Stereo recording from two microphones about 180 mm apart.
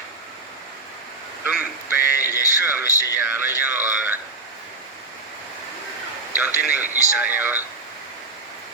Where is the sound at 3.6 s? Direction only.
10° right (ahead or behind).